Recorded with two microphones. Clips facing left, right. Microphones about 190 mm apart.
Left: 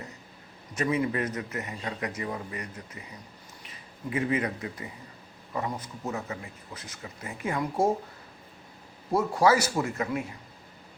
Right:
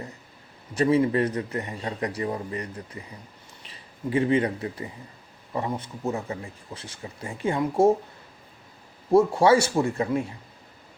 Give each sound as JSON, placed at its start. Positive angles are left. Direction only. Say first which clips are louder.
{"t": 0.7, "sound": "a man's voice", "louder": "right 6 dB", "side_deg": -30}
{"t": 9.1, "sound": "a man's voice", "louder": "right 5 dB", "side_deg": -25}